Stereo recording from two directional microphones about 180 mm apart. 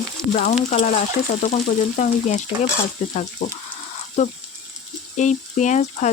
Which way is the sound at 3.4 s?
50° left (ahead or behind).